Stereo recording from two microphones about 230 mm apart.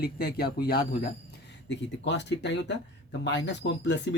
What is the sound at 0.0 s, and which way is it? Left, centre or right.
Speech, left.